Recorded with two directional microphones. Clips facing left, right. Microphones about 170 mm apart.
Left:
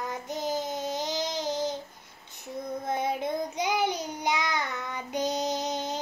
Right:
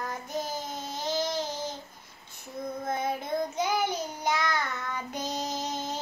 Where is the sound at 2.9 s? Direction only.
15° left (ahead or behind).